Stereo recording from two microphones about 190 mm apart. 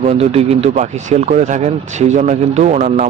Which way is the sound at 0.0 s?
35° right (ahead or behind).